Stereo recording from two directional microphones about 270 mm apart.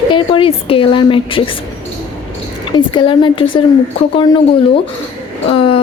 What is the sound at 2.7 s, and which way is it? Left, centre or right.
Speech, centre.